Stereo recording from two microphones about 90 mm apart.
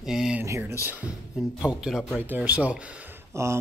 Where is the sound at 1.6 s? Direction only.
5° right (ahead or behind).